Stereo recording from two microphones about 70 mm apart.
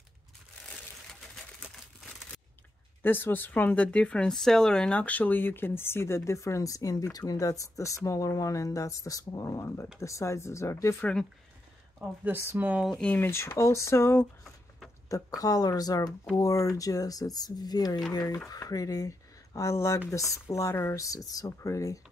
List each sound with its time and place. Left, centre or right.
2.0 s crumpling: centre
3.0 s speech: left
11.0 s speech: centre
12.3 s speech: right
13.1 s speech: left
15.0 s speech: left
16.3 s speech: left
18.1 s speech: left